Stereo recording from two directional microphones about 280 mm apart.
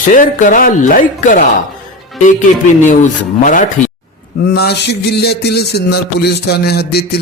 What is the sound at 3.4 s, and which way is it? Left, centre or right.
Speech, left.